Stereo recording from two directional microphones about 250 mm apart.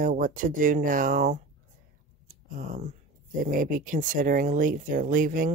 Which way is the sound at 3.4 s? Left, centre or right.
Right.